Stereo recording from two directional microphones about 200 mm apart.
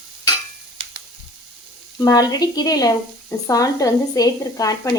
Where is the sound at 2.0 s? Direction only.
20° left (ahead or behind).